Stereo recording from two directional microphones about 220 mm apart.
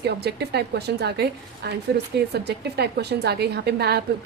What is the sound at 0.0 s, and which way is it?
A woman's voice, 50° right (ahead or behind).